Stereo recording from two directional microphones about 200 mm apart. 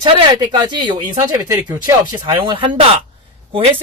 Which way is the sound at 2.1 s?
25° right (ahead or behind).